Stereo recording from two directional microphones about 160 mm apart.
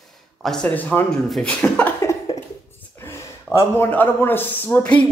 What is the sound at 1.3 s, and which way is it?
Cough, 5° left (ahead or behind).